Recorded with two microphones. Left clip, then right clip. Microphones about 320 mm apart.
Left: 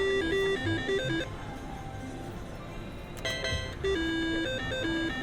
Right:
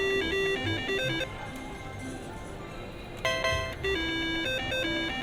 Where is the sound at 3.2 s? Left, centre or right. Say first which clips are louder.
Right 5 dB; right.